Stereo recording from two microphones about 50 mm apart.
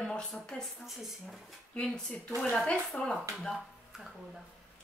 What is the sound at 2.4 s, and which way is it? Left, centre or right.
Speech, centre.